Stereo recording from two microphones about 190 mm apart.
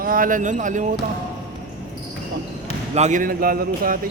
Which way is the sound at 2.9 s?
40° right (ahead or behind).